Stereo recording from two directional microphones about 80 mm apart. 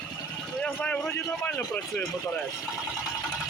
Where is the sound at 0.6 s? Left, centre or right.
Centre.